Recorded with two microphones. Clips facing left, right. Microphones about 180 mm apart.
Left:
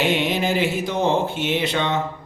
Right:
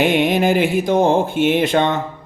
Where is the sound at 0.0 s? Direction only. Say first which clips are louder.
Right 6 dB; 50° right (ahead or behind).